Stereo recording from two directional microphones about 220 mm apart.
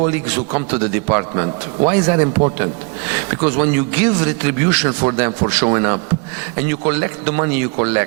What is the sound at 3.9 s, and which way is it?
A man's voice, 15° right (ahead or behind).